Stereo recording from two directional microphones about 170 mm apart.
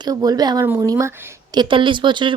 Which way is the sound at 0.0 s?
25° right (ahead or behind).